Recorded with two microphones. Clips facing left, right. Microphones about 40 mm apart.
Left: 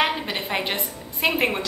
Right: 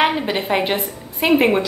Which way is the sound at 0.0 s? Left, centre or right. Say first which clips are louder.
Right 5 dB; centre.